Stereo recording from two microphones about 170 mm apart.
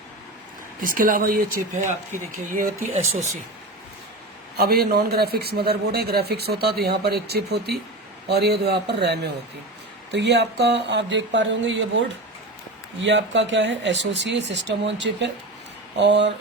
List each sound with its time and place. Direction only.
0.8 s speech: 55° right (ahead or behind)
4.5 s a man's voice: 65° right (ahead or behind)
10.1 s speech: 90° right